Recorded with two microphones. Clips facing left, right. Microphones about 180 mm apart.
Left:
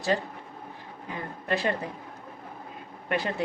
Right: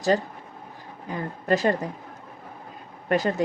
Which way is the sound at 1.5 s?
40° right (ahead or behind).